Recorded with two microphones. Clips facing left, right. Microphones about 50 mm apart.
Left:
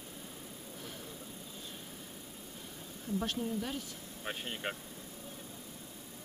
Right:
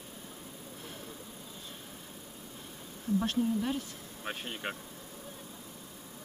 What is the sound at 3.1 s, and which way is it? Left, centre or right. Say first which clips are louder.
Speech: right 6 dB; right.